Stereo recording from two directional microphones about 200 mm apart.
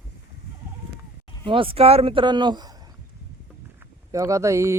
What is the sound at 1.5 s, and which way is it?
Speech, 25° right (ahead or behind).